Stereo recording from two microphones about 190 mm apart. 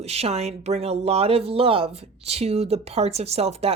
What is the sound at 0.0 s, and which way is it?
Speech, 35° right (ahead or behind).